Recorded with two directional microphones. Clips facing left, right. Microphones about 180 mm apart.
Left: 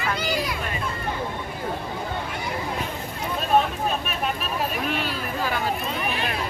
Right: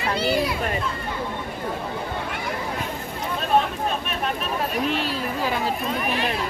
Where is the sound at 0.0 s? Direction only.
30° right (ahead or behind).